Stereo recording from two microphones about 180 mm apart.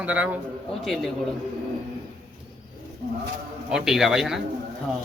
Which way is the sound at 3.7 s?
5° right (ahead or behind).